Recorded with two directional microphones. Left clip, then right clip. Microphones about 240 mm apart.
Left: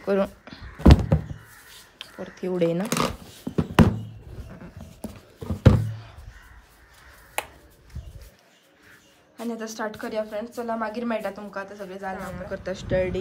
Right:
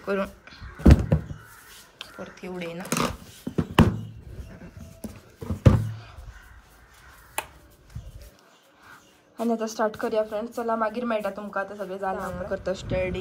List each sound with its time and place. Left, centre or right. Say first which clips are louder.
0.0 s speech: left 4 dB; centre
0.7 s thunk: left 2 dB; centre
2.2 s speech: left 12 dB; left
2.8 s a sound: left 2 dB; centre
5.0 s a sound: left 1 dB; centre
9.4 s speech: right 6 dB; centre